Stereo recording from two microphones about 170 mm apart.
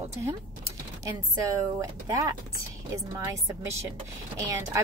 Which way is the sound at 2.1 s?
20° right (ahead or behind).